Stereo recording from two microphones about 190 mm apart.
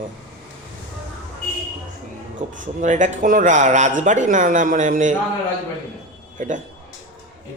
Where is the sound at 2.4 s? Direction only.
45° right (ahead or behind).